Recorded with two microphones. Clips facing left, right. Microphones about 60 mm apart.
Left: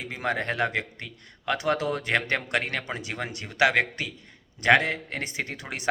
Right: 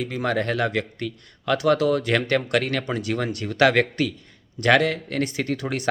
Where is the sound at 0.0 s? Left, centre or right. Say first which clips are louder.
Right 5 dB; left.